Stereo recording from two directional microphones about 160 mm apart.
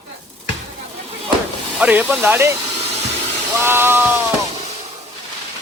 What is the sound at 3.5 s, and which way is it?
Speech, 15° right (ahead or behind).